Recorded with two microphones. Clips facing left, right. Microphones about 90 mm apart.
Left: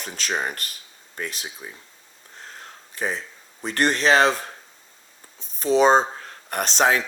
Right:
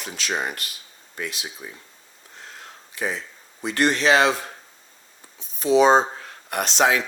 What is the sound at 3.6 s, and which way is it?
Speech, 40° left (ahead or behind).